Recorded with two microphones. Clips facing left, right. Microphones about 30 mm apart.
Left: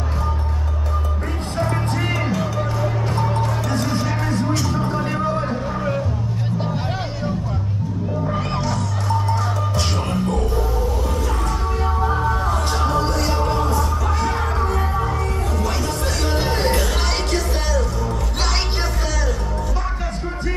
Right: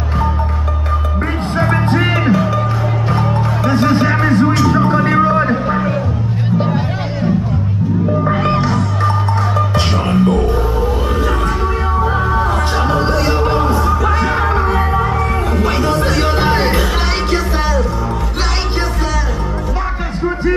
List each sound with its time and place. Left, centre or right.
1.6 s music: right
8.4 s music: right
11.4 s music: right